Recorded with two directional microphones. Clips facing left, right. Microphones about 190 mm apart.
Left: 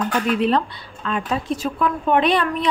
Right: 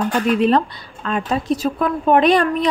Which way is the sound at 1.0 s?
40° right (ahead or behind).